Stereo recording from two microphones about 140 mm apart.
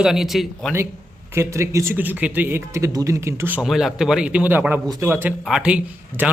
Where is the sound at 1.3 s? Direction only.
20° right (ahead or behind).